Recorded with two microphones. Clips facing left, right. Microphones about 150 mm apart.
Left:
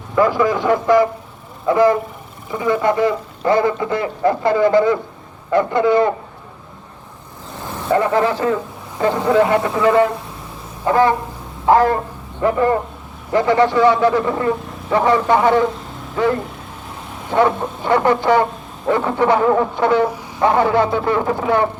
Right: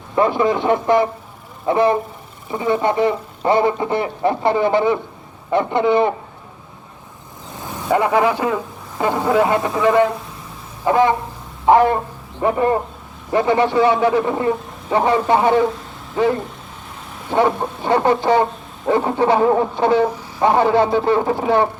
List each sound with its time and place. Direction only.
0.2 s speech: 25° right (ahead or behind)
7.7 s a man's voice: 15° right (ahead or behind)
11.7 s speech: 20° right (ahead or behind)